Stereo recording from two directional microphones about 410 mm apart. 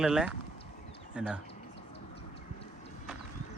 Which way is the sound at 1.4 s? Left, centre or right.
Left.